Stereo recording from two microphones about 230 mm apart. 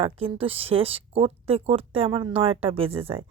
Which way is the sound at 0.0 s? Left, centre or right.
Right.